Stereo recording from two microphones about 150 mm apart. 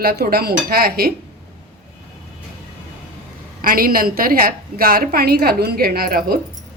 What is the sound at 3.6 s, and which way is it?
A woman's voice, 75° right (ahead or behind).